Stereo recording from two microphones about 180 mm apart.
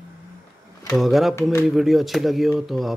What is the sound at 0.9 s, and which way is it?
Speech, centre (ahead or behind).